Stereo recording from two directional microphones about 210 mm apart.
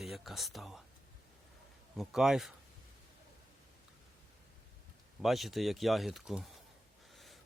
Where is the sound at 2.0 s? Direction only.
Centre (ahead or behind).